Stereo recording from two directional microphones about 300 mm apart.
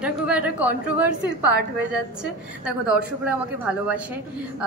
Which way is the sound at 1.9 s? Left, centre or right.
Centre.